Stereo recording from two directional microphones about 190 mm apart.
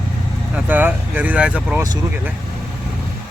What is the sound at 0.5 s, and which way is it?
Speech, 10° right (ahead or behind).